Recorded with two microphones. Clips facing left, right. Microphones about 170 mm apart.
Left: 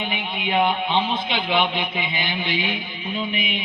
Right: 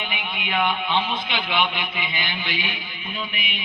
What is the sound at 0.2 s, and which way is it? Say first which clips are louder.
A man's voice: left 4 dB; 30° left (ahead or behind).